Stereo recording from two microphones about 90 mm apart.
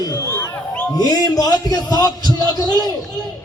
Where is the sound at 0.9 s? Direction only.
45° left (ahead or behind).